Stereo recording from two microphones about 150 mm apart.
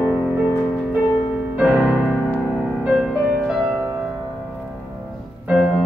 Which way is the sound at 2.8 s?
5° right (ahead or behind).